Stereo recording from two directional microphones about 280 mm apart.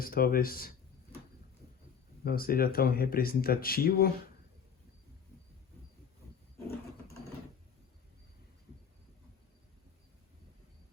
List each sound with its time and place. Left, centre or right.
0.0 s speech: left
2.2 s speech: left